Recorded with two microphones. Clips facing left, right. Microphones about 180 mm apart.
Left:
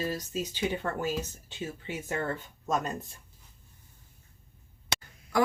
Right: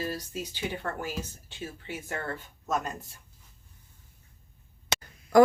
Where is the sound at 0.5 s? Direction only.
20° left (ahead or behind).